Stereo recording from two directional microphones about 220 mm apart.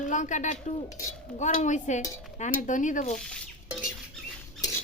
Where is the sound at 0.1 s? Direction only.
35° left (ahead or behind).